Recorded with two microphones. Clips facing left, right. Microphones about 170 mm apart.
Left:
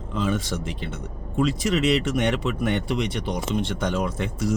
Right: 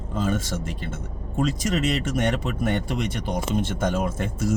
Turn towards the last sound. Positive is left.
turn(degrees=-45)  # may be behind; listen again after turning